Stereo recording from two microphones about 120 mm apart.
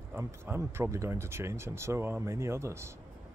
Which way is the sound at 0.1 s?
20° right (ahead or behind).